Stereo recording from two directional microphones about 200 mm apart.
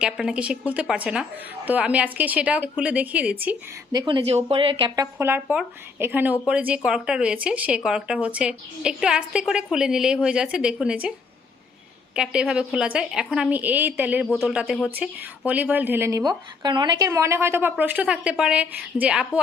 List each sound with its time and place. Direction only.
0.0 s a woman's voice: 5° right (ahead or behind)
3.9 s a woman's voice: 25° right (ahead or behind)
5.1 s a woman's voice: 10° right (ahead or behind)
12.1 s a woman's voice: 5° right (ahead or behind)